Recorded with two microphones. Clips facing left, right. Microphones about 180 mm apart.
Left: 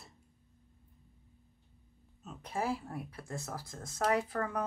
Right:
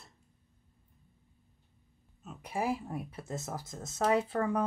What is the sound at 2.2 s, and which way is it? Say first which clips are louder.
Speech: right 2 dB; 5° right (ahead or behind).